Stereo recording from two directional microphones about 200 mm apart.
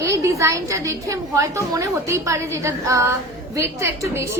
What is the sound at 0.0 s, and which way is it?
A woman's voice, 15° right (ahead or behind).